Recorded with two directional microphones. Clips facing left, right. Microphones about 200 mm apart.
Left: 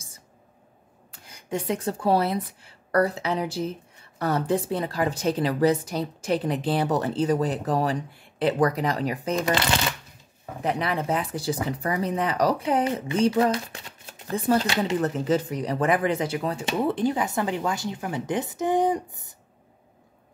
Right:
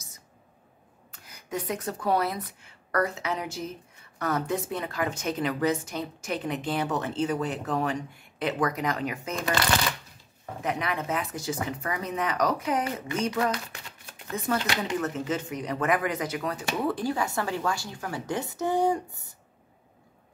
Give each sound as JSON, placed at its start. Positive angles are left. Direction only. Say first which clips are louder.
{"t": 1.2, "sound": "a woman's voice", "louder": "left 4 dB", "side_deg": 25}
{"t": 10.6, "sound": "speech", "louder": "left 4 dB", "side_deg": 30}